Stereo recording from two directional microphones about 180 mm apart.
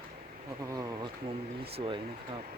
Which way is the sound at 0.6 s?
20° right (ahead or behind).